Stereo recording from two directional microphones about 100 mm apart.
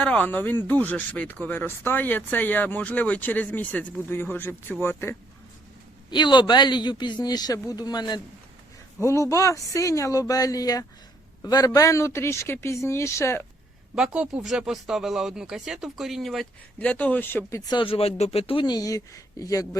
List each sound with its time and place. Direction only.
0.0 s speech: 15° left (ahead or behind)
6.1 s a man's voice: 50° left (ahead or behind)
9.0 s speech: 30° left (ahead or behind)
13.9 s speech: 10° right (ahead or behind)
16.8 s speech: 15° left (ahead or behind)
17.8 s speech: 80° left
18.6 s speech: 40° left (ahead or behind)